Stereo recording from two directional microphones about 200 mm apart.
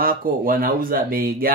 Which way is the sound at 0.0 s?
45° right (ahead or behind).